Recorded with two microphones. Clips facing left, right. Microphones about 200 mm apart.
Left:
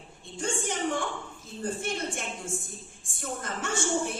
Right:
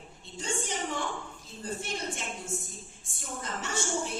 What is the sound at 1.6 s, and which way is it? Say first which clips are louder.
A woman's voice: left 4 dB; 50° left (ahead or behind).